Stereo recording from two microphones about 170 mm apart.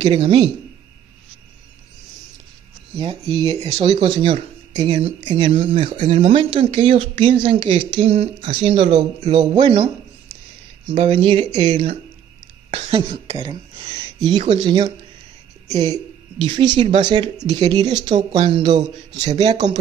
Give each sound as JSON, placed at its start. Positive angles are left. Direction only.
{"t": 0.0, "sound": "speech", "side_deg": -30}
{"t": 3.0, "sound": "speech", "side_deg": -30}
{"t": 10.9, "sound": "speech", "side_deg": -30}
{"t": 15.9, "sound": "speech", "side_deg": -30}